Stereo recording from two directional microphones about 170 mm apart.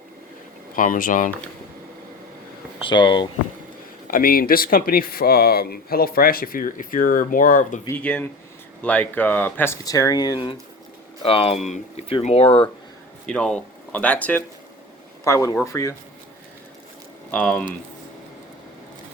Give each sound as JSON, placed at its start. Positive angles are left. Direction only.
{"t": 0.8, "sound": "speech", "side_deg": 55}
{"t": 2.8, "sound": "speech", "side_deg": 25}
{"t": 4.1, "sound": "speech", "side_deg": 60}
{"t": 7.9, "sound": "speech", "side_deg": 10}
{"t": 13.2, "sound": "speech", "side_deg": 5}
{"t": 17.3, "sound": "speech", "side_deg": 5}